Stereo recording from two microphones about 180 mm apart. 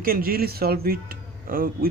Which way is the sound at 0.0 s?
55° right (ahead or behind).